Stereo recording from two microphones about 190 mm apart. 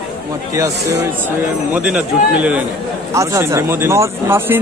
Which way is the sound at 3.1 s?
15° right (ahead or behind).